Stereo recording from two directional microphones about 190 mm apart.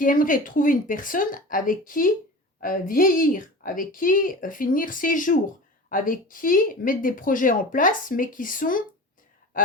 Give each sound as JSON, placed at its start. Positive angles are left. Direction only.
{"t": 0.0, "sound": "speech", "side_deg": 45}